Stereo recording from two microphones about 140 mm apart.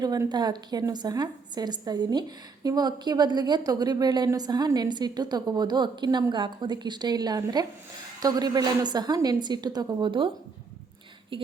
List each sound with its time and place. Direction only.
0.0 s a woman's voice: 30° right (ahead or behind)